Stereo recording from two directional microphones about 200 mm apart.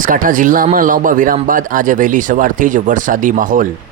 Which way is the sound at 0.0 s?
40° right (ahead or behind).